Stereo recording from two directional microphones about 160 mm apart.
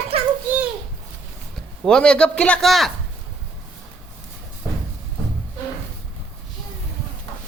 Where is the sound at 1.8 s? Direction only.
5° left (ahead or behind).